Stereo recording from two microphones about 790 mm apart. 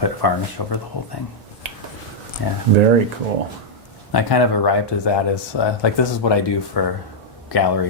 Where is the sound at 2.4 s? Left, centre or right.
Left.